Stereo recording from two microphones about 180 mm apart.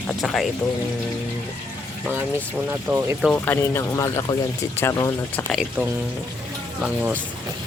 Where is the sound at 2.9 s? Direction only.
15° right (ahead or behind).